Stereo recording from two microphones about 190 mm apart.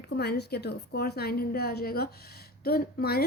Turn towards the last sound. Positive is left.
turn(degrees=55)  # may be behind; listen again after turning